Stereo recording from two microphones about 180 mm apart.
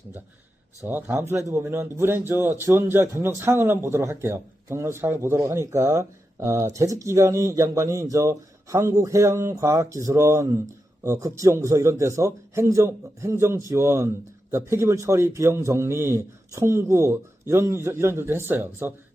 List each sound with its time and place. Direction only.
0.8 s speech: 10° right (ahead or behind)